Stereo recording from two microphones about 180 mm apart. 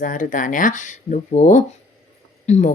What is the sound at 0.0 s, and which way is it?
Speech, 45° left (ahead or behind).